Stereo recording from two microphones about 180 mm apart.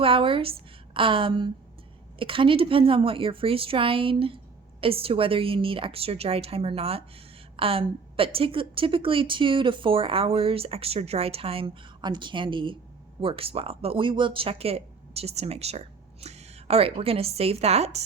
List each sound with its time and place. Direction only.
0.0 s a woman's voice: 30° right (ahead or behind)